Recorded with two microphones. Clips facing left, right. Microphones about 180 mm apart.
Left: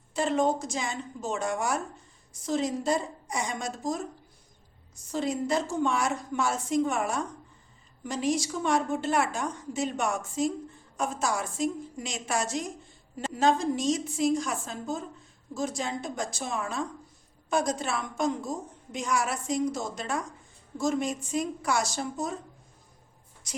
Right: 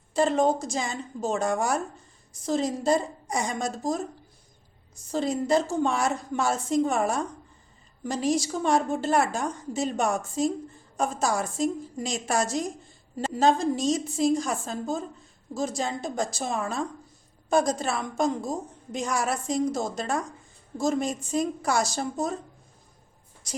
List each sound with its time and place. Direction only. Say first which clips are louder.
0.1 s a woman's voice: right 3 dB; 35° right (ahead or behind)
5.1 s a woman's voice: right 4 dB; 30° right (ahead or behind)